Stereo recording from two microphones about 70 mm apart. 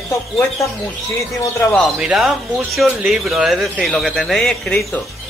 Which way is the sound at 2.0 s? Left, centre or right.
Centre.